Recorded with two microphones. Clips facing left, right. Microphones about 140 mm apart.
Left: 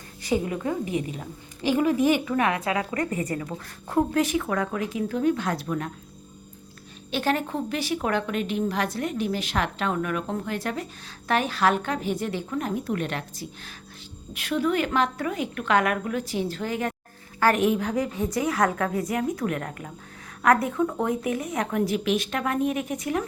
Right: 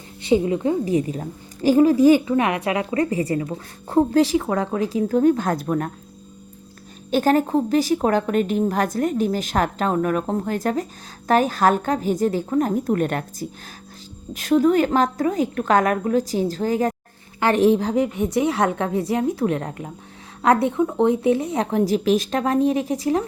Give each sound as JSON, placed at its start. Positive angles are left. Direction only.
{"t": 0.3, "sound": "a woman's voice", "side_deg": -25}
{"t": 7.1, "sound": "a woman's voice", "side_deg": -45}